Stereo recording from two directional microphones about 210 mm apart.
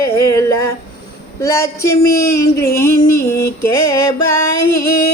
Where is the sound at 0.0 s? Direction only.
15° left (ahead or behind).